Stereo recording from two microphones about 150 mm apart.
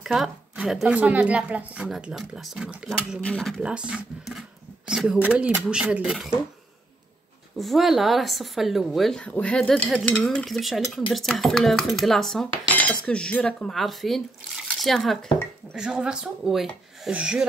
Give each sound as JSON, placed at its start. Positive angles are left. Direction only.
{"t": 0.0, "sound": "speech", "side_deg": -5}
{"t": 3.2, "sound": "speech", "side_deg": 5}
{"t": 3.6, "sound": "speech", "side_deg": -5}
{"t": 7.5, "sound": "speech", "side_deg": 0}